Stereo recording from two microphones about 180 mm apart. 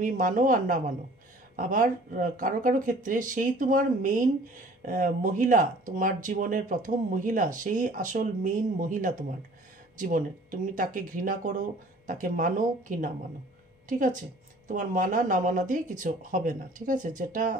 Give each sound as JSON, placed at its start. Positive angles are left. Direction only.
{"t": 0.0, "sound": "a woman's voice", "side_deg": -50}